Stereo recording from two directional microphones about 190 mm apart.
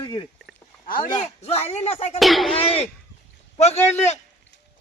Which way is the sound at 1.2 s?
35° left (ahead or behind).